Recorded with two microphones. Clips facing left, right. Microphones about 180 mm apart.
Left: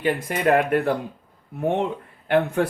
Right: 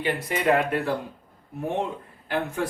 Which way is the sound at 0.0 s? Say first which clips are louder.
Left 3 dB; 50° left (ahead or behind).